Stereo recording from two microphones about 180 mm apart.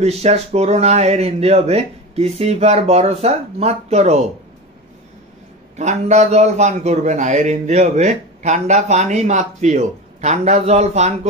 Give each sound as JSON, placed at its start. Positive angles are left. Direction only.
{"t": 0.0, "sound": "a man's voice", "side_deg": -35}
{"t": 5.8, "sound": "a man's voice", "side_deg": -40}